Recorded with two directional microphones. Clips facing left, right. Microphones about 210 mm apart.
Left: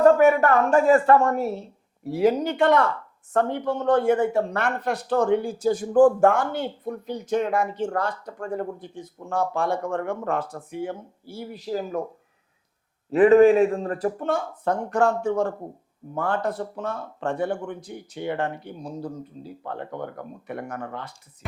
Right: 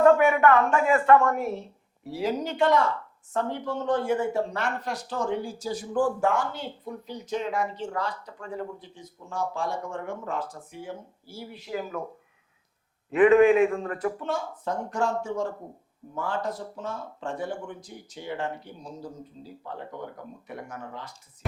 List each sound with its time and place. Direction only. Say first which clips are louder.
0.0 s a woman's voice: left 2 dB; 40° left (ahead or behind)
2.0 s speech: left 7 dB; 55° left (ahead or behind)
11.5 s a woman's voice: left 5 dB; 35° left (ahead or behind)
13.1 s a woman's voice: left 3 dB; 35° left (ahead or behind)
14.2 s speech: left 5 dB; 55° left (ahead or behind)